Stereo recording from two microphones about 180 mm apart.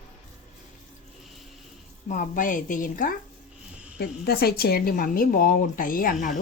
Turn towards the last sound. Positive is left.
turn(degrees=50)  # may be behind; listen again after turning